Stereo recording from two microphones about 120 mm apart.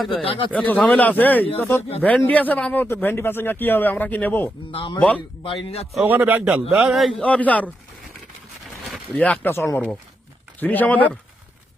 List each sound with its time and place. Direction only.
0.2 s speech: 50° left (ahead or behind)
0.5 s a man's voice: 15° left (ahead or behind)
4.7 s speech: 50° left (ahead or behind)
4.9 s a man's voice: 10° left (ahead or behind)
5.4 s speech: 50° left (ahead or behind)
6.1 s a man's voice: 15° right (ahead or behind)
7.2 s a man's voice: 10° left (ahead or behind)
9.1 s a man's voice: 10° left (ahead or behind)